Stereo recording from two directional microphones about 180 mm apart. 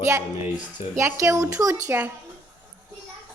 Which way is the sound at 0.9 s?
15° right (ahead or behind).